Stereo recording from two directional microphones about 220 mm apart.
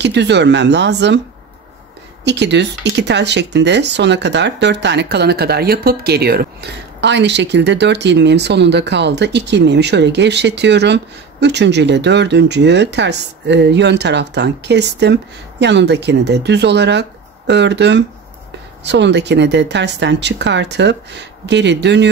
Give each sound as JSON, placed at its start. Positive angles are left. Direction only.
{"t": 0.0, "sound": "speech", "side_deg": -50}
{"t": 2.2, "sound": "speech", "side_deg": -50}